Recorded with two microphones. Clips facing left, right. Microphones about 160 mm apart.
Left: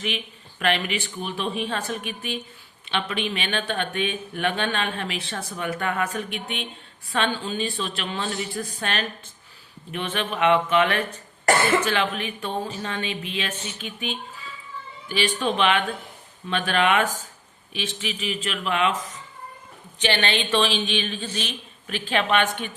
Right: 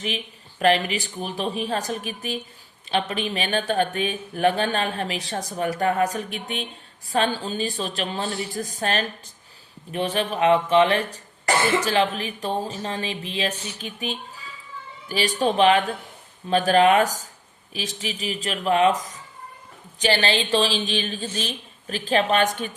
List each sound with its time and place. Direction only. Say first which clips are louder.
0.6 s speech: right 4 dB; 35° right (ahead or behind)